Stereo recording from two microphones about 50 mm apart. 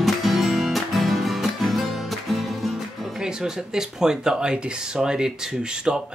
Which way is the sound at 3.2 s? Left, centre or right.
Centre.